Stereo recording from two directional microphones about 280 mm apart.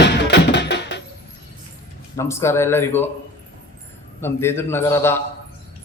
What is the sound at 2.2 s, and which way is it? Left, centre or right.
Speech, centre.